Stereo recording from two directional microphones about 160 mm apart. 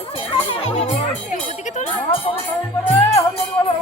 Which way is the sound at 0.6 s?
40° left (ahead or behind).